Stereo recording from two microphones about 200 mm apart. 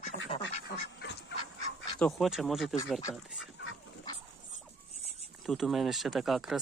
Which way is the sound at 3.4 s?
70° left (ahead or behind).